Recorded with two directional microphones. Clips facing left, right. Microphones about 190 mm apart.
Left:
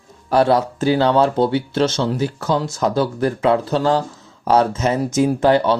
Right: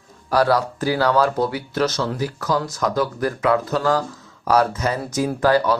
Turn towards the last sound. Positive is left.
turn(degrees=25)  # may be behind; listen again after turning